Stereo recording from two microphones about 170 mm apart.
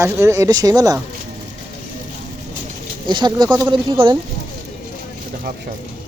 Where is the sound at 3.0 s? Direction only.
25° right (ahead or behind).